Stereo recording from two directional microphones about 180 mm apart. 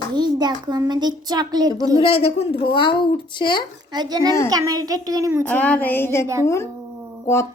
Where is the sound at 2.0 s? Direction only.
30° left (ahead or behind).